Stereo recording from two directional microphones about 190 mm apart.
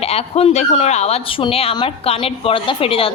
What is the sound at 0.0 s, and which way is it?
Speech, 30° left (ahead or behind).